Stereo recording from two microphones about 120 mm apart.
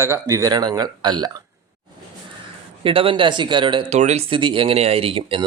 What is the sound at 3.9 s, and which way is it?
Speech, 65° right (ahead or behind).